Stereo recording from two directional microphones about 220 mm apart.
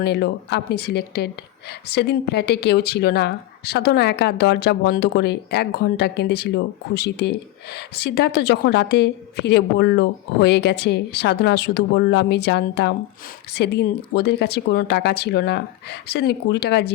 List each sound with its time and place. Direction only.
0.0 s speech: 45° left (ahead or behind)